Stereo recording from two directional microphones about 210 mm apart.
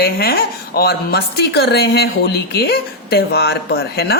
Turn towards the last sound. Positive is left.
turn(degrees=50)  # may be behind; listen again after turning